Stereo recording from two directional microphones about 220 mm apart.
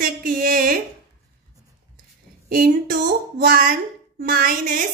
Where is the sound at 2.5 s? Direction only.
40° right (ahead or behind).